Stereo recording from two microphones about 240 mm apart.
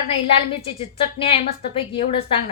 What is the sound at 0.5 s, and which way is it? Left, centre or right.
A woman's voice, left.